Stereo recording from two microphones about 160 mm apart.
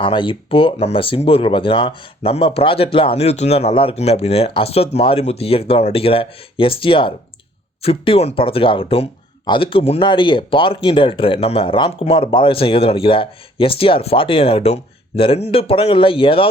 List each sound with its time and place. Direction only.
0.0 s speech: 30° left (ahead or behind)